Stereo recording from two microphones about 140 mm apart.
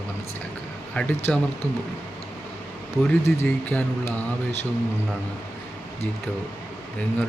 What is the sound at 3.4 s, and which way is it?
Speech, 10° left (ahead or behind).